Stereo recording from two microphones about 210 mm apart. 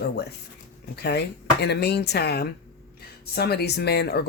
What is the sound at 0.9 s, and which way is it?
Speech, 50° left (ahead or behind).